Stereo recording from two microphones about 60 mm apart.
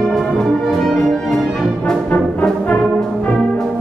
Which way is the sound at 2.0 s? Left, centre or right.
Left.